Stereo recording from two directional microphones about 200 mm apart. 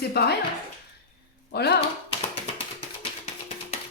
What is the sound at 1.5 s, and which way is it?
Speech, 55° left (ahead or behind).